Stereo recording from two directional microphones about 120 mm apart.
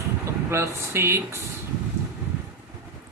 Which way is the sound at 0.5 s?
20° right (ahead or behind).